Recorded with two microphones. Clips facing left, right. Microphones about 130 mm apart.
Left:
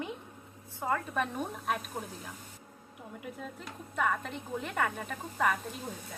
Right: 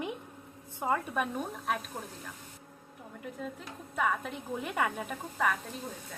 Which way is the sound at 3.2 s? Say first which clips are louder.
Right 3 dB; centre (ahead or behind).